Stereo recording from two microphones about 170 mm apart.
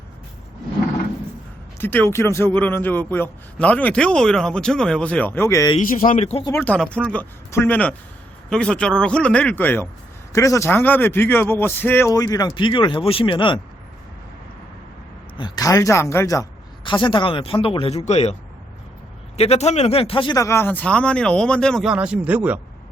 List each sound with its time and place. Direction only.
1.8 s a man's voice: 10° left (ahead or behind)
6.0 s speech: 40° left (ahead or behind)
6.4 s a man's voice: 15° left (ahead or behind)
15.4 s speech: 25° left (ahead or behind)
19.4 s a man's voice: 40° left (ahead or behind); by 21.9 s 5° left (ahead or behind)
21.9 s speech: 5° right (ahead or behind)